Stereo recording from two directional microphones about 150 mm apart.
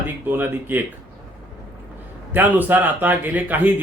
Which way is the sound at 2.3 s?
10° right (ahead or behind).